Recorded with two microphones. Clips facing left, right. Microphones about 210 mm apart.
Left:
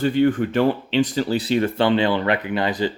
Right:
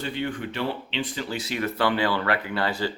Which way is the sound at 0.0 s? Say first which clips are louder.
Left 12 dB; 45° left (ahead or behind).